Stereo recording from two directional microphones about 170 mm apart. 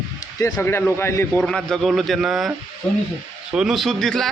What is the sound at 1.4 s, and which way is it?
A man's voice, 5° left (ahead or behind).